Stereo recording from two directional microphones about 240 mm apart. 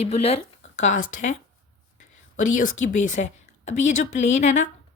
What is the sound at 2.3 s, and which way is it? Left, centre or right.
Speech, left.